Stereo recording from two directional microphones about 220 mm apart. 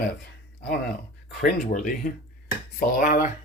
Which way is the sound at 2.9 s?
40° left (ahead or behind).